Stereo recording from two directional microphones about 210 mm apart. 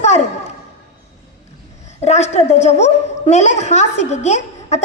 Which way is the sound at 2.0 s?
30° left (ahead or behind).